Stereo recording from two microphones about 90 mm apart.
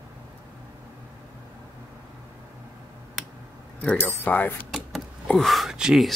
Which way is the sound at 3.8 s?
15° left (ahead or behind).